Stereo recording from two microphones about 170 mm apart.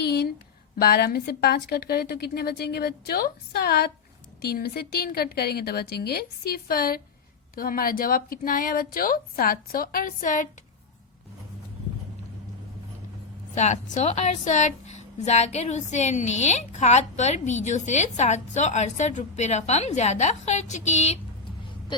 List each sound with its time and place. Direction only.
0.8 s a woman's voice: 65° left (ahead or behind); by 10.5 s 50° left (ahead or behind)
13.6 s a woman's voice: 45° left (ahead or behind)